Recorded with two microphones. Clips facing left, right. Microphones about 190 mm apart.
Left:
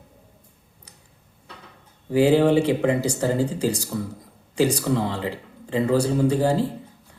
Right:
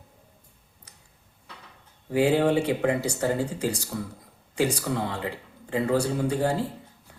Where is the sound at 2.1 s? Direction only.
30° left (ahead or behind).